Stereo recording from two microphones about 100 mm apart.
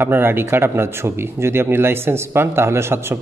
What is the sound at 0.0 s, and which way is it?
Speech, 20° right (ahead or behind).